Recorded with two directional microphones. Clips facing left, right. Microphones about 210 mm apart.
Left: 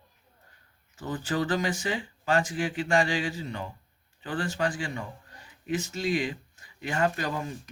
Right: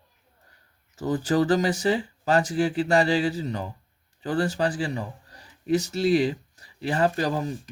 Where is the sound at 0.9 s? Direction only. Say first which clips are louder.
Right 7 dB; 40° right (ahead or behind).